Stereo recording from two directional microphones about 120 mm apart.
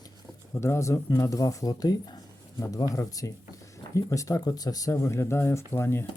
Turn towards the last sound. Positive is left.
turn(degrees=20)  # may be behind; listen again after turning